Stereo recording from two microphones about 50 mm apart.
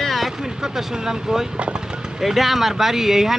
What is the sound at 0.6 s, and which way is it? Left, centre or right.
Speech, centre.